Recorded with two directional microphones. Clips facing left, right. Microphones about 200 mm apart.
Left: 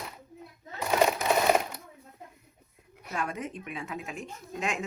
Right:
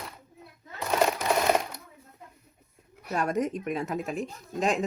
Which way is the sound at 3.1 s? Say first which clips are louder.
Right 7 dB; 40° right (ahead or behind).